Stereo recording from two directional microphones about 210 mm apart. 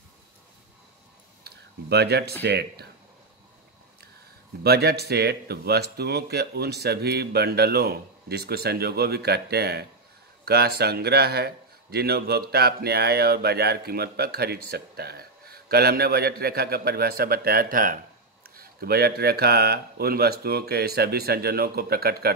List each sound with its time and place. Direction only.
1.4 s a sound: 50° right (ahead or behind)
2.4 s speech: 50° right (ahead or behind)
4.6 s speech: 50° right (ahead or behind)